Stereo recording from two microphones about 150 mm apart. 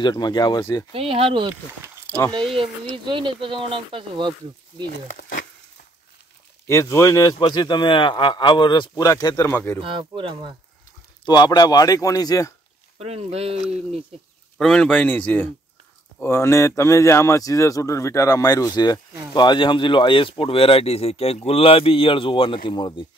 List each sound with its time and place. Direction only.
0.0 s speech: 30° left (ahead or behind)
0.9 s speech: 40° right (ahead or behind)
3.1 s speech: 35° right (ahead or behind)
6.7 s speech: 20° left (ahead or behind)
9.8 s speech: 35° right (ahead or behind)
11.2 s speech: 30° left (ahead or behind)
13.0 s speech: 45° right (ahead or behind)
14.6 s a man's voice: 5° left (ahead or behind); by 23.0 s 30° left (ahead or behind)